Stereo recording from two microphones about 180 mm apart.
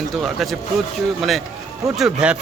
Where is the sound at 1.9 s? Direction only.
5° right (ahead or behind).